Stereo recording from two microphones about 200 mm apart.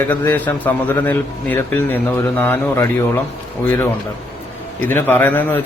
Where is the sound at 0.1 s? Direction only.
10° left (ahead or behind).